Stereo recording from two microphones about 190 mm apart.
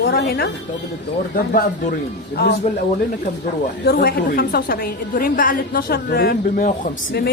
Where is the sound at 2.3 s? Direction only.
65° left (ahead or behind).